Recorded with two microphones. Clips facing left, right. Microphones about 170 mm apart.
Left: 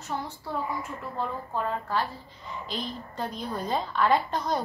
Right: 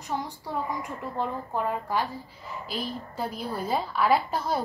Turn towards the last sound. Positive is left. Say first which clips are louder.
# right 1 dB
turn(degrees=-5)  # may be behind; listen again after turning